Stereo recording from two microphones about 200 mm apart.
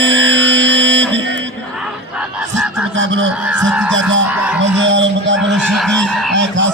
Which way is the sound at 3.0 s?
70° right (ahead or behind).